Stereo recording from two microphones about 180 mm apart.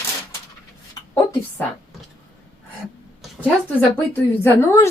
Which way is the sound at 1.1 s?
20° left (ahead or behind).